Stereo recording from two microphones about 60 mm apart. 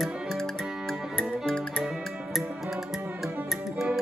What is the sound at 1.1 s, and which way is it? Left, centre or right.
Music, centre.